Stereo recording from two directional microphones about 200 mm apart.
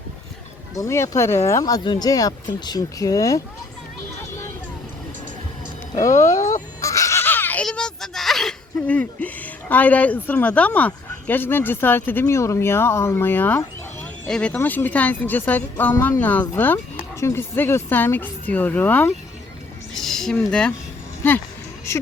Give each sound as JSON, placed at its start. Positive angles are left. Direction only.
{"t": 0.8, "sound": "speech", "side_deg": 15}
{"t": 6.1, "sound": "speech", "side_deg": 15}